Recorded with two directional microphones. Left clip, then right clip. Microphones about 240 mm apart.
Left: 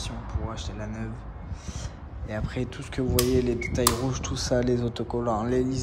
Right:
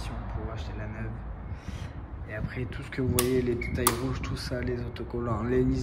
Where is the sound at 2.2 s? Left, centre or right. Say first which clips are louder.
Left 4 dB; centre.